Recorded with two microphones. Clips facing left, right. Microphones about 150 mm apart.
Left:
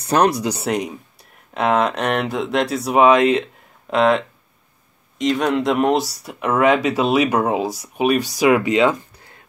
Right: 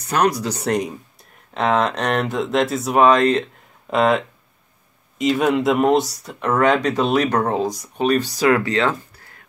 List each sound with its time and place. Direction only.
0.0 s speech: 30° left (ahead or behind)
0.4 s speech: 10° left (ahead or behind)
0.7 s speech: centre (ahead or behind)
5.2 s speech: 5° right (ahead or behind); by 9.4 s 15° left (ahead or behind)